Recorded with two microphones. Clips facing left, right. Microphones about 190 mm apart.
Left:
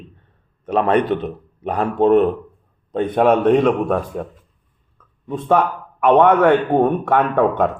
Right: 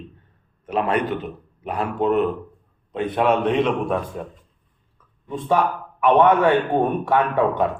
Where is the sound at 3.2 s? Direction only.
45° left (ahead or behind).